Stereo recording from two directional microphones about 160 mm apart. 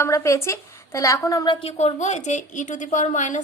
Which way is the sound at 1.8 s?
45° left (ahead or behind).